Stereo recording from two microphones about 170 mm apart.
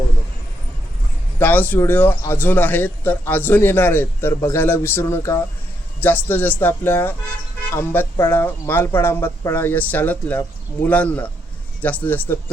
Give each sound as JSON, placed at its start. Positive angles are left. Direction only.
{"t": 1.4, "sound": "a man's voice", "side_deg": 10}